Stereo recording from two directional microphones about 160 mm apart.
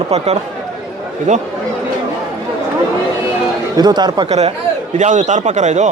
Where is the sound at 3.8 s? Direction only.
25° right (ahead or behind).